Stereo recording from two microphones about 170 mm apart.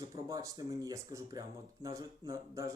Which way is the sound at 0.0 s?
20° right (ahead or behind).